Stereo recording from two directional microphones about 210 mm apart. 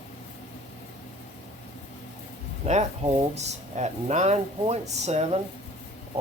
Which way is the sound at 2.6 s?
30° right (ahead or behind).